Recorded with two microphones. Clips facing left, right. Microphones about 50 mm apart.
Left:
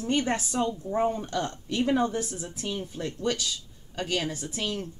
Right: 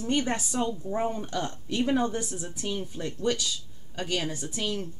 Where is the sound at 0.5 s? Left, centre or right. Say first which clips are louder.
Left 2 dB; centre.